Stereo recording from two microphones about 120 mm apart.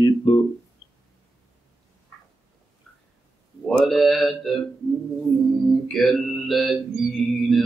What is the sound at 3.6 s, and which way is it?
Mantra, 5° left (ahead or behind).